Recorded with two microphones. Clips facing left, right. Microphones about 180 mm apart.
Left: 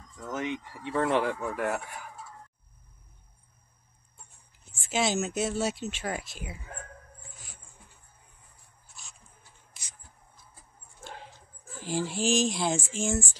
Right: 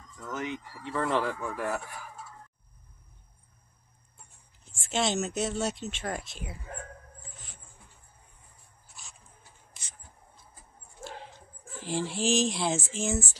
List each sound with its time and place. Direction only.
0.2 s speech: 25° left (ahead or behind)
4.7 s speech: 5° left (ahead or behind)
11.8 s speech: centre (ahead or behind)